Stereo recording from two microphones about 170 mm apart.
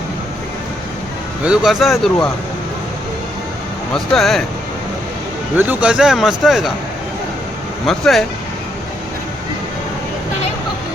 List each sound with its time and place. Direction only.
1.5 s speech: centre (ahead or behind)
3.9 s speech: centre (ahead or behind)
5.5 s speech: 10° right (ahead or behind)
7.9 s speech: centre (ahead or behind)